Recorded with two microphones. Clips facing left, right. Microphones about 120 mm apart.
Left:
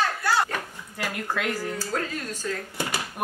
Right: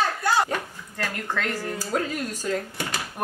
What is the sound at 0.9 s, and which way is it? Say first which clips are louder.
Speech: even; 10° left (ahead or behind).